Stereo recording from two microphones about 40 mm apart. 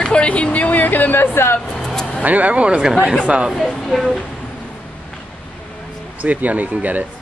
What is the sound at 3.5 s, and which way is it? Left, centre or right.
Speech, centre.